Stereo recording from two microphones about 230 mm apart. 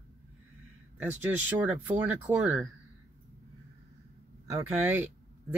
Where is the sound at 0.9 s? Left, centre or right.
Centre.